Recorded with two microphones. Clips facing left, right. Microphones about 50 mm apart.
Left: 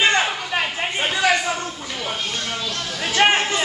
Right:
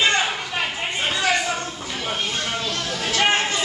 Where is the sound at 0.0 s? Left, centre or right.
Centre.